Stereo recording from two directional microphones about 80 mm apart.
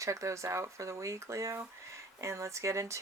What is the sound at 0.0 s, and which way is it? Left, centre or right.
Speech, right.